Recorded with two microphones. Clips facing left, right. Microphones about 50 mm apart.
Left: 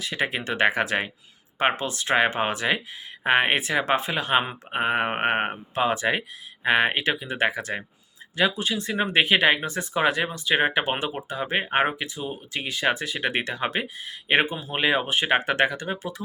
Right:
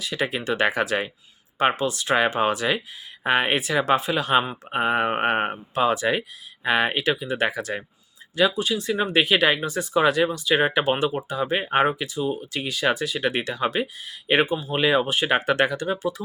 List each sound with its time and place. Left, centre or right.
0.0 s speech: left